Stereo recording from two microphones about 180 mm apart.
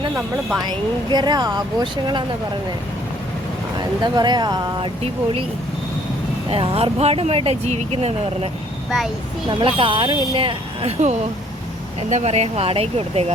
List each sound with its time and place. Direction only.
1.1 s speech: 20° right (ahead or behind)
3.8 s speech: 25° right (ahead or behind)
6.5 s speech: 30° right (ahead or behind)
9.5 s speech: 30° right (ahead or behind)